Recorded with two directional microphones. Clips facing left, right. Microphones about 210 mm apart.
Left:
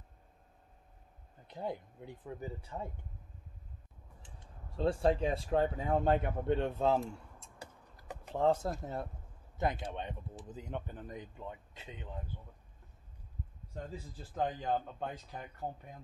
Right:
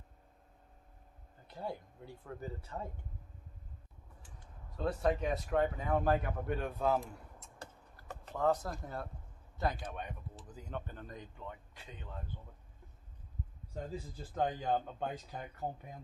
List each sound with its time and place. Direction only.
1.5 s speech: 20° left (ahead or behind)
4.2 s speech: 30° left (ahead or behind)
7.5 s typing: 10° left (ahead or behind)
8.4 s a man's voice: 25° left (ahead or behind)
13.7 s speech: centre (ahead or behind)